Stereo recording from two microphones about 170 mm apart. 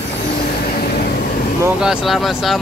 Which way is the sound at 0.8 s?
65° left (ahead or behind).